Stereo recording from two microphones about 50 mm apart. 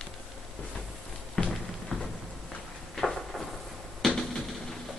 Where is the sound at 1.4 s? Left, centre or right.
Centre.